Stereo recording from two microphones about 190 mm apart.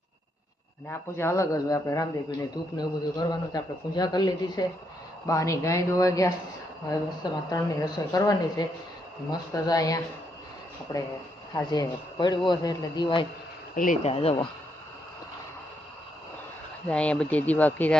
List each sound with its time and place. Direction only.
0.9 s speech: 15° left (ahead or behind)
7.5 s speech: 20° left (ahead or behind)
13.7 s speech: 45° left (ahead or behind)
16.9 s speech: 5° left (ahead or behind)